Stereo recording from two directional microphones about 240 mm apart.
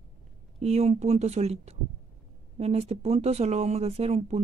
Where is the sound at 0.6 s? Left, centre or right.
Right.